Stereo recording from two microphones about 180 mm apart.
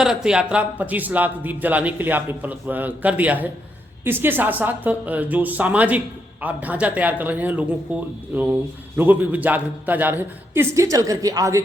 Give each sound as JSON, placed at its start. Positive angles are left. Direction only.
{"t": 0.0, "sound": "speech", "side_deg": -5}